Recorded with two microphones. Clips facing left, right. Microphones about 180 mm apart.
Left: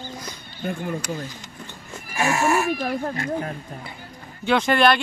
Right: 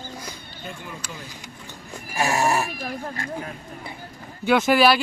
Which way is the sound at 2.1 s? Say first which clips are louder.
Left 1 dB; 40° right (ahead or behind).